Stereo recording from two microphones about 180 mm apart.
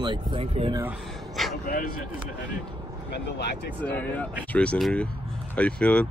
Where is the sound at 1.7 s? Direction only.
55° left (ahead or behind).